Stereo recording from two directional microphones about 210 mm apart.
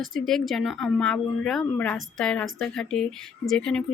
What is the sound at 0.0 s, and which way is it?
Speech, centre (ahead or behind).